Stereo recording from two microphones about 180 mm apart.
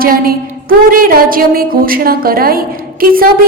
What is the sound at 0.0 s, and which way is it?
A woman's voice, 55° right (ahead or behind).